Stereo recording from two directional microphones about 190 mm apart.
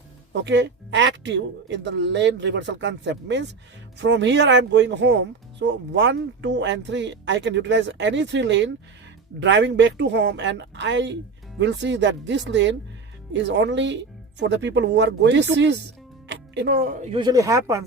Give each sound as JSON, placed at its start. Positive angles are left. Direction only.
{"t": 0.4, "sound": "speech", "side_deg": -65}
{"t": 17.1, "sound": "speech", "side_deg": -25}